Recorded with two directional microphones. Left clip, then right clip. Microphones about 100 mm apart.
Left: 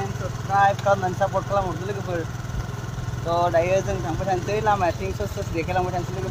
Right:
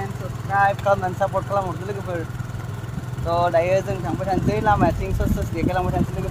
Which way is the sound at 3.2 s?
45° right (ahead or behind).